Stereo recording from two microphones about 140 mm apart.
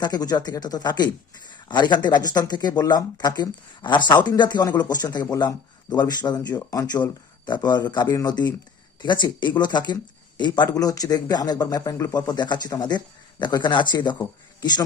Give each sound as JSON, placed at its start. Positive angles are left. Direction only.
{"t": 0.0, "sound": "a man's voice", "side_deg": 30}